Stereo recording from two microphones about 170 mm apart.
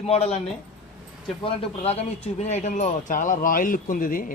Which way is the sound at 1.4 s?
30° left (ahead or behind).